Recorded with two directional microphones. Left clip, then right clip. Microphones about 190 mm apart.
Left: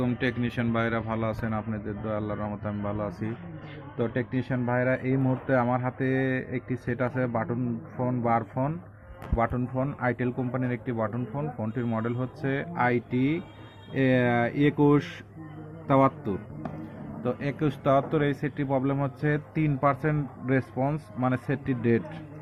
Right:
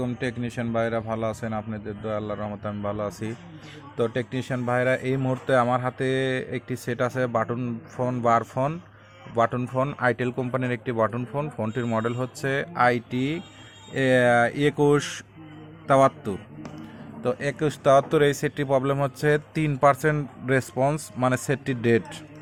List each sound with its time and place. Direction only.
0.0 s a man's voice: 25° right (ahead or behind); by 22.2 s 40° right (ahead or behind)